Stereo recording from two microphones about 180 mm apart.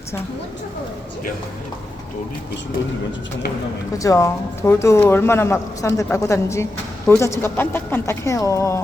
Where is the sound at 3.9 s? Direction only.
15° left (ahead or behind).